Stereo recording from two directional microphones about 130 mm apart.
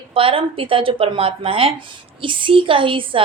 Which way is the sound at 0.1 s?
45° right (ahead or behind).